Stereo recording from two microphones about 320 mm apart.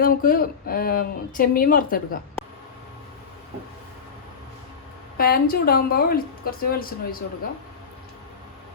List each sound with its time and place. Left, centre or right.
0.0 s a woman's voice: left
5.1 s a woman's voice: left